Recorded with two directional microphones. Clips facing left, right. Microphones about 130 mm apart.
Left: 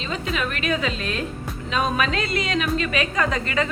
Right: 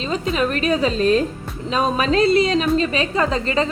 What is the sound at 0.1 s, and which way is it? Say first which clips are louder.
A woman's voice: right 6 dB; 35° right (ahead or behind).